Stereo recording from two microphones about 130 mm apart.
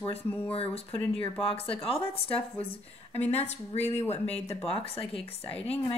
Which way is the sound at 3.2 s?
55° left (ahead or behind).